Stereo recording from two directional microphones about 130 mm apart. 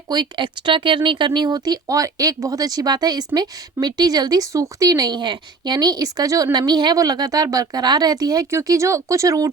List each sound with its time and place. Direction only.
0.1 s speech: 35° right (ahead or behind)